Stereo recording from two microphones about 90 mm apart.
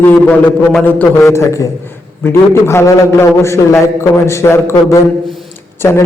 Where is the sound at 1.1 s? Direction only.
30° left (ahead or behind).